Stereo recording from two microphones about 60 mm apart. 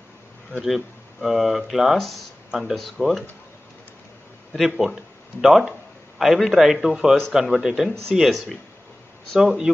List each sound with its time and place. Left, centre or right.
0.5 s speech: centre
4.6 s speech: centre